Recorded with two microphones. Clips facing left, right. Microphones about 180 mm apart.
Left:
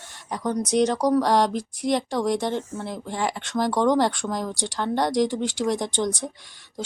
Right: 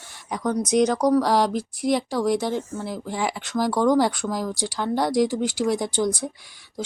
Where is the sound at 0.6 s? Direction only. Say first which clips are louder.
Right 2 dB; 35° left (ahead or behind).